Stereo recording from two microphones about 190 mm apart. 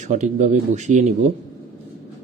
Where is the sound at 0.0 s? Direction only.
40° right (ahead or behind).